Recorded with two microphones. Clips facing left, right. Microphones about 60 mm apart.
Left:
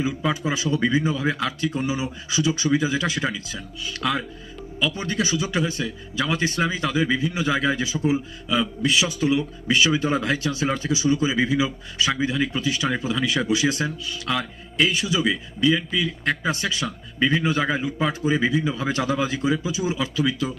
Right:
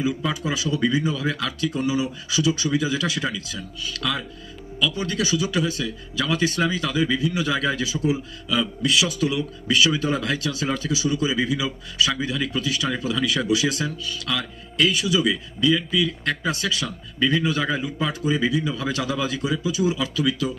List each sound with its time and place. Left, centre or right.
0.4 s speech: left